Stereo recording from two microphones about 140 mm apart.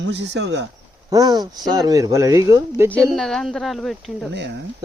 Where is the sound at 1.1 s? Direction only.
25° right (ahead or behind).